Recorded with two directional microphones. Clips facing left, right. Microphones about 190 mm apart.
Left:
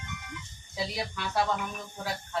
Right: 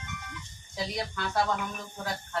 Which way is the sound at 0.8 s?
5° left (ahead or behind).